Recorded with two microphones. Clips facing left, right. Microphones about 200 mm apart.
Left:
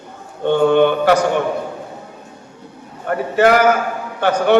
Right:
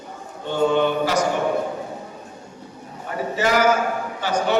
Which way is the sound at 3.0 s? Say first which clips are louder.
Left 8 dB; 60° left (ahead or behind).